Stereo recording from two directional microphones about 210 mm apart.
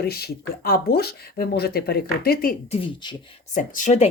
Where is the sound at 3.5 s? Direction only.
35° left (ahead or behind).